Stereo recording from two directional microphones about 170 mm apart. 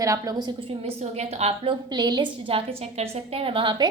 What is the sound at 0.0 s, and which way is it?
Speech, 20° right (ahead or behind).